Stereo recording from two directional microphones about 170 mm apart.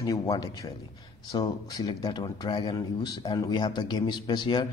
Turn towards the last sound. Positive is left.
turn(degrees=25)  # may be behind; listen again after turning